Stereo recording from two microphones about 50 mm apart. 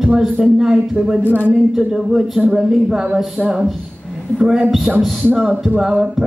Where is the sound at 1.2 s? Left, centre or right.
Left.